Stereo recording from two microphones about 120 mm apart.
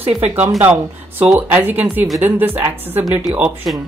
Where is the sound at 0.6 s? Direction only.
15° right (ahead or behind).